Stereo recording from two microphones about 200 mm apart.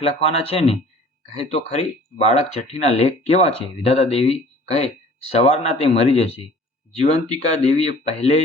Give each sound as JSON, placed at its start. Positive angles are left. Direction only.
{"t": 0.0, "sound": "speech", "side_deg": 30}